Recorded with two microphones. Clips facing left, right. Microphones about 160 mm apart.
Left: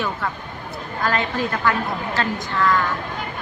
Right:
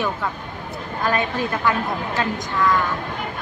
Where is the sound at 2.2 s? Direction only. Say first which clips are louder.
Even; 15° right (ahead or behind).